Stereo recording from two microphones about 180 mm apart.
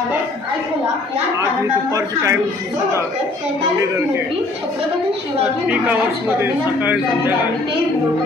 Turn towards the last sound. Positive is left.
turn(degrees=-10)  # may be behind; listen again after turning